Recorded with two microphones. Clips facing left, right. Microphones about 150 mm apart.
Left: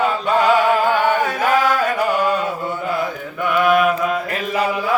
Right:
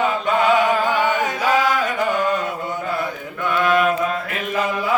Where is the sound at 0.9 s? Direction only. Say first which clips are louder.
Left 2 dB; 20° right (ahead or behind).